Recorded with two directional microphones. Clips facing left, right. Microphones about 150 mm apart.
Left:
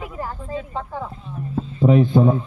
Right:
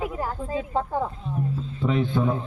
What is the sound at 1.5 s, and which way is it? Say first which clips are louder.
Speech: left 11 dB; 45° left (ahead or behind).